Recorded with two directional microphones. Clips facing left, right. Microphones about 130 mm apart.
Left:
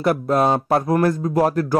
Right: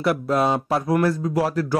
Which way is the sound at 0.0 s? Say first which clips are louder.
Left 3 dB; 45° left (ahead or behind).